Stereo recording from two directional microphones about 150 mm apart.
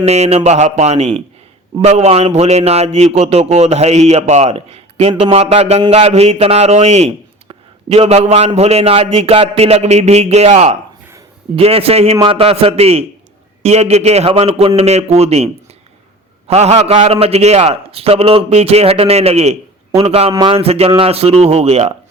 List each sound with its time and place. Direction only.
0.0 s a man's voice: 45° right (ahead or behind)
16.5 s a man's voice: 45° right (ahead or behind)